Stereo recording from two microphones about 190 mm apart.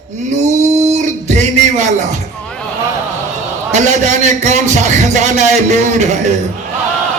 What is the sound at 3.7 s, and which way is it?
A man's voice, 40° right (ahead or behind).